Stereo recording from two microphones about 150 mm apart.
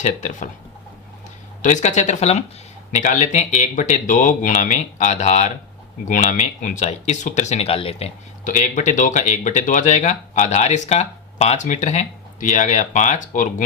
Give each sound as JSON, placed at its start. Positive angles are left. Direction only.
{"t": 0.0, "sound": "speech", "side_deg": 55}
{"t": 1.6, "sound": "speech", "side_deg": 55}
{"t": 8.4, "sound": "speech", "side_deg": 55}